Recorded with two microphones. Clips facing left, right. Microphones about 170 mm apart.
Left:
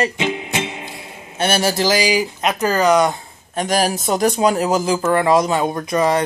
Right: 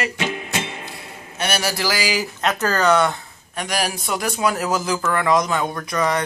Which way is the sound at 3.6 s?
40° left (ahead or behind).